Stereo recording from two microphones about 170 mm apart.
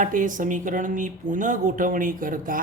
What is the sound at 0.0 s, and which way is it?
Speech, 50° right (ahead or behind).